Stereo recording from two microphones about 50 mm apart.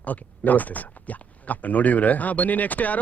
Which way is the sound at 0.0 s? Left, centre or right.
Left.